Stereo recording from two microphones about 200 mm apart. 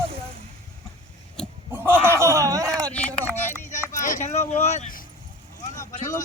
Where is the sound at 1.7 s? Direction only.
10° right (ahead or behind).